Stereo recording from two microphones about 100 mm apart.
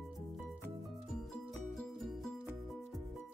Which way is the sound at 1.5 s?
Centre (ahead or behind).